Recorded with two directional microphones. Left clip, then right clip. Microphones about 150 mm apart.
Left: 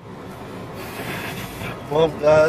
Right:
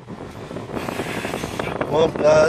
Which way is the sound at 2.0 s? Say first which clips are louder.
Even; 10° left (ahead or behind).